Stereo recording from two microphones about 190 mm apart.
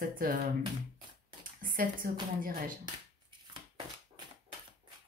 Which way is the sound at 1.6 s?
50° right (ahead or behind).